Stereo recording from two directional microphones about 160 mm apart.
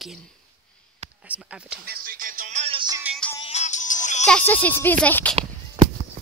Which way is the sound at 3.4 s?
45° left (ahead or behind).